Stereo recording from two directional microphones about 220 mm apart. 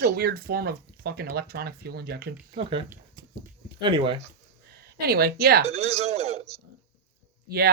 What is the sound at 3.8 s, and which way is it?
Speech, 25° right (ahead or behind).